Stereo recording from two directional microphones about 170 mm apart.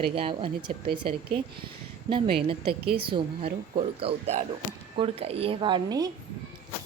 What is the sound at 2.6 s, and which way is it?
Speech, 70° right (ahead or behind).